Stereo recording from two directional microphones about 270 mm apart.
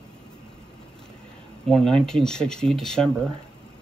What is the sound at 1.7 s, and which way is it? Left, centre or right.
Speech, centre.